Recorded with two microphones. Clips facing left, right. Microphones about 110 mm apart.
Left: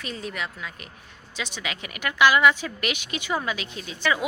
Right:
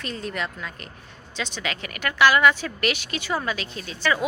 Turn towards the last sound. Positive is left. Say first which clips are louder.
# right 1 dB
turn(degrees=15)  # may be behind; listen again after turning